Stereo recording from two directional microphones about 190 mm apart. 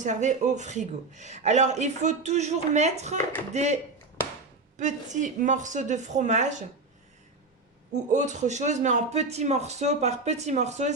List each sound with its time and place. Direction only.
0.0 s a man's voice: 40° right (ahead or behind)
4.8 s a man's voice: 40° right (ahead or behind)
8.1 s a man's voice: 40° right (ahead or behind)